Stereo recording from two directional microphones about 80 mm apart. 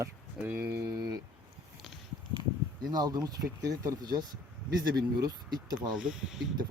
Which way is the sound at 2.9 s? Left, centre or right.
Right.